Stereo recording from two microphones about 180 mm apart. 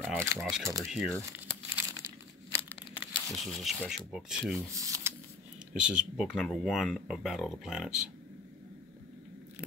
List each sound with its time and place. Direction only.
0.0 s speech: 10° right (ahead or behind)
0.4 s speech: centre (ahead or behind)
1.3 s crumpling: 10° right (ahead or behind)
3.1 s speech: centre (ahead or behind)
4.7 s a sound: 20° right (ahead or behind)
5.8 s speech: 5° right (ahead or behind)